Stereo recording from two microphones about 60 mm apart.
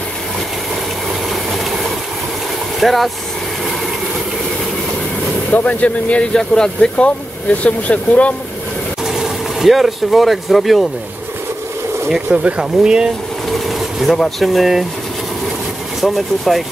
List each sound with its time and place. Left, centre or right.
2.8 s speech: centre
5.5 s speech: left
9.0 s speech: centre
12.1 s speech: centre
13.5 s vehicle: centre
14.4 s speech: centre
16.0 s speech: centre